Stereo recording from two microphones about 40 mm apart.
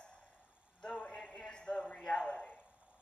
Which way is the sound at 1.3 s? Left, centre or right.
Centre.